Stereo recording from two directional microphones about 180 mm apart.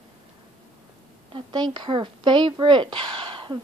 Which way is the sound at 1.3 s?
25° right (ahead or behind).